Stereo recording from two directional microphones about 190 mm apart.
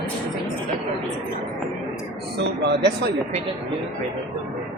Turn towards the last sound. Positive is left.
turn(degrees=-60)  # may be behind; listen again after turning